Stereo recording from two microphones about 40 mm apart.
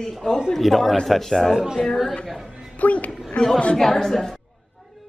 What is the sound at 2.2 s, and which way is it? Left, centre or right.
Speech, centre.